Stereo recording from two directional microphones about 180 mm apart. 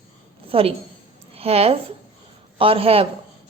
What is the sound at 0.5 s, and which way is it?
A woman's voice, 30° right (ahead or behind).